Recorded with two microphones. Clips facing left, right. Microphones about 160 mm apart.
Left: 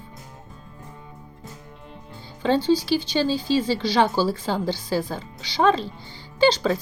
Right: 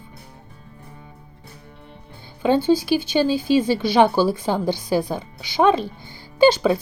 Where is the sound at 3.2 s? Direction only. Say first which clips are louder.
Right 5 dB; 15° right (ahead or behind).